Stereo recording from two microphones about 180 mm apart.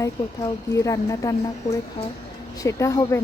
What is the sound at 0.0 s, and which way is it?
A woman's voice, 15° left (ahead or behind).